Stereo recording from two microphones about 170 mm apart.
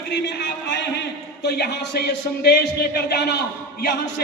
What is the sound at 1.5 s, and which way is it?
Speech, 70° left (ahead or behind).